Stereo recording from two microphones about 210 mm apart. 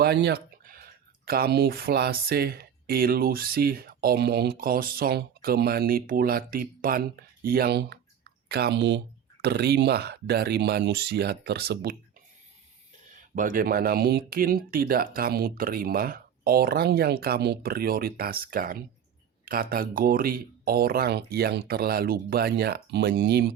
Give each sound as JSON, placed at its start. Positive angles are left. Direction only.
{"t": 0.0, "sound": "speech", "side_deg": -50}
{"t": 13.3, "sound": "speech", "side_deg": -40}